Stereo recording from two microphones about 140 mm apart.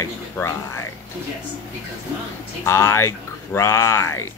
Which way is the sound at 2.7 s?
20° left (ahead or behind).